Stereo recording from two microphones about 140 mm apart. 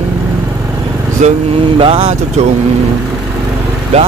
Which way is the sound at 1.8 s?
40° right (ahead or behind).